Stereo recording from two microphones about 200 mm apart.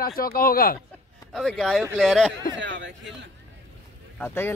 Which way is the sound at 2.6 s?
65° right (ahead or behind).